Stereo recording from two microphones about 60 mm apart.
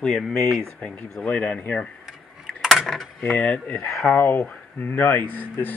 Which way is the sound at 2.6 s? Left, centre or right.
Centre.